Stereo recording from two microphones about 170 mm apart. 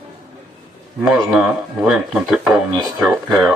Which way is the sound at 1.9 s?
Centre (ahead or behind).